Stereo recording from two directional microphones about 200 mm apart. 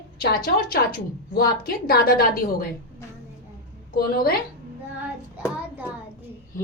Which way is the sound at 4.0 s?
50° left (ahead or behind).